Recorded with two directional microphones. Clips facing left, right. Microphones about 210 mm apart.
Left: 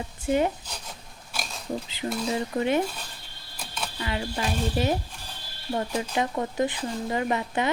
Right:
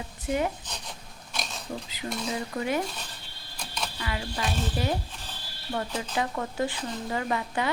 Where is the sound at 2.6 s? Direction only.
25° left (ahead or behind).